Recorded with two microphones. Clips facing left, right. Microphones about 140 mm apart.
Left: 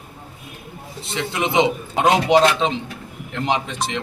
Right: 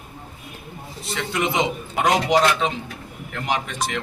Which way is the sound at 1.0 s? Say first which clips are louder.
Left 1 dB; 20° left (ahead or behind).